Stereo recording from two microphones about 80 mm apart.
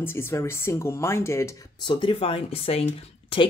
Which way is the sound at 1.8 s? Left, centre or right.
Left.